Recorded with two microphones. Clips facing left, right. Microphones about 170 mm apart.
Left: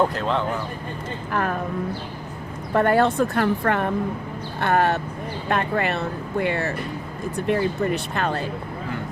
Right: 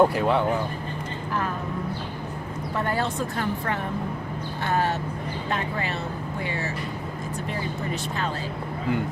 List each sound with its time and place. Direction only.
0.0 s speech: 10° right (ahead or behind)
1.3 s speech: 60° left (ahead or behind)
2.7 s speech: 60° left (ahead or behind)